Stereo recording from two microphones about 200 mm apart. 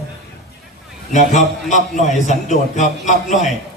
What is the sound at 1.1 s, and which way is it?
A man's voice, 35° left (ahead or behind).